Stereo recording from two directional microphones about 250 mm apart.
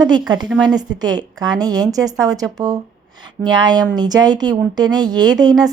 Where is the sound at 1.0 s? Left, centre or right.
Centre.